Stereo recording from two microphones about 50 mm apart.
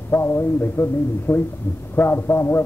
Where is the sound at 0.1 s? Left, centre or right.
Left.